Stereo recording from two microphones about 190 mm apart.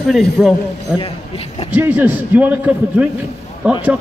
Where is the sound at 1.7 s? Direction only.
10° right (ahead or behind).